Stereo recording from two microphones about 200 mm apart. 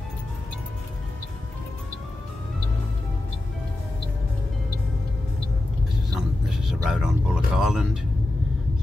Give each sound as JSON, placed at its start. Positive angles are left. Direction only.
{"t": 6.6, "sound": "vehicle", "side_deg": 0}